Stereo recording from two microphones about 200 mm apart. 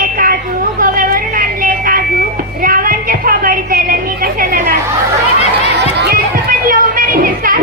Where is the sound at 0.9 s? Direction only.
45° right (ahead or behind).